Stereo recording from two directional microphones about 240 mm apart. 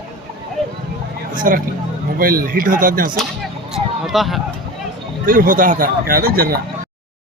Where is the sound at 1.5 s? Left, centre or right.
Right.